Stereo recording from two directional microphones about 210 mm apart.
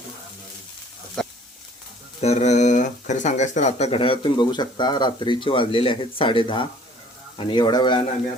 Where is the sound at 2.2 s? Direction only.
30° left (ahead or behind).